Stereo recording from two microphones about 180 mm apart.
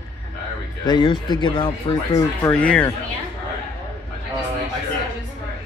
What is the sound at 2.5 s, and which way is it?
Speech, 5° left (ahead or behind).